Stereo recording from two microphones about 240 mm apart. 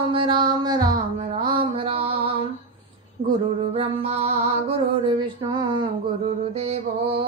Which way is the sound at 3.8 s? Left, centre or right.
Right.